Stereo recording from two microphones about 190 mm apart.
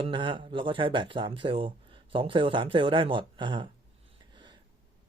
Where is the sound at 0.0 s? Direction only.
25° right (ahead or behind).